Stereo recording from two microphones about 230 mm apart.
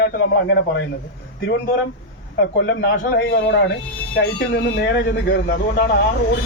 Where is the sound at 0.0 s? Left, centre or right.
Left.